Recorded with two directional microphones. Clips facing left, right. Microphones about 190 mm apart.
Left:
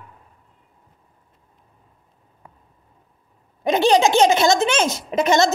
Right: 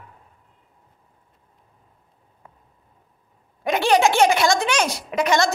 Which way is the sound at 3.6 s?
20° left (ahead or behind).